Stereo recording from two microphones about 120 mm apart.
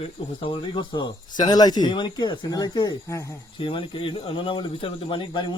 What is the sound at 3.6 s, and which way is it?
Speech, 45° left (ahead or behind).